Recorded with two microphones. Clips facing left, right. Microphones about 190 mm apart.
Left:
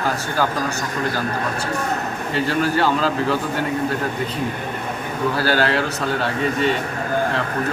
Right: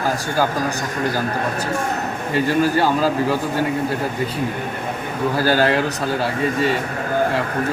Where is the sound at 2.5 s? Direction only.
10° right (ahead or behind).